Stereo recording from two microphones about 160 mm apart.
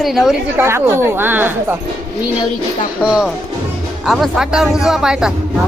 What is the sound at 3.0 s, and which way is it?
Speech, 5° right (ahead or behind).